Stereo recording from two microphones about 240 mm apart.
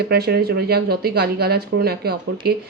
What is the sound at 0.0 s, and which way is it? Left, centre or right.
Speech, right.